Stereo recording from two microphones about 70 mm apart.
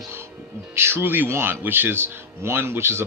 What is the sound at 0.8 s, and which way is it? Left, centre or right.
Speech, right.